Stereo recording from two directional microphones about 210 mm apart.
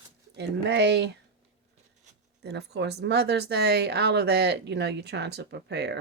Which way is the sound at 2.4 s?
50° right (ahead or behind).